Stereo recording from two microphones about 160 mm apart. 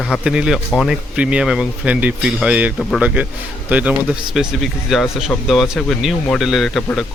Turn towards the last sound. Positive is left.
turn(degrees=5)  # may be behind; listen again after turning